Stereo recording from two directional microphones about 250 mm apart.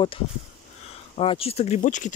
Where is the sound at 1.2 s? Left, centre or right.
Left.